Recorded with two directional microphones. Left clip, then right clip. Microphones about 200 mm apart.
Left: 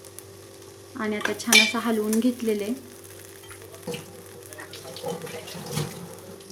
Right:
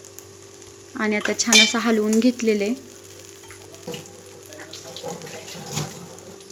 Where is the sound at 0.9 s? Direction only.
15° right (ahead or behind).